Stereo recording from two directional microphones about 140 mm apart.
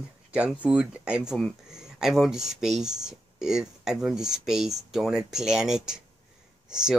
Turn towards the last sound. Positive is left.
turn(degrees=-5)  # may be behind; listen again after turning